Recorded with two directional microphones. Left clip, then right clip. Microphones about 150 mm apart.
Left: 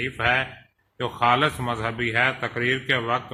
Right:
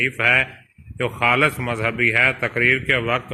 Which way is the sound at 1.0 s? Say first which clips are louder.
Right 3 dB; 20° right (ahead or behind).